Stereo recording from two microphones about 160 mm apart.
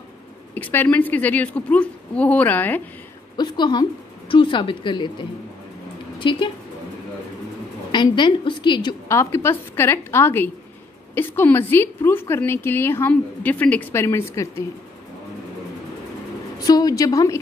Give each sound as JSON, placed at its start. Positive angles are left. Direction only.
{"t": 0.6, "sound": "a woman's voice", "side_deg": 10}
{"t": 3.3, "sound": "a woman's voice", "side_deg": 30}
{"t": 7.9, "sound": "a woman's voice", "side_deg": 30}
{"t": 9.1, "sound": "a woman's voice", "side_deg": 15}
{"t": 16.5, "sound": "a woman's voice", "side_deg": 25}